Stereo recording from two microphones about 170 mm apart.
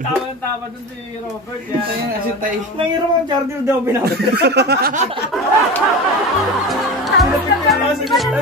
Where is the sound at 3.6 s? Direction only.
15° right (ahead or behind).